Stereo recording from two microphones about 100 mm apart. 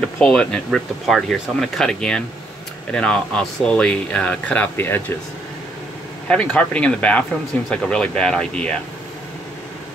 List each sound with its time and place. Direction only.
0.2 s speech: 10° left (ahead or behind)
4.7 s speech: 25° left (ahead or behind)
6.2 s speech: 10° left (ahead or behind)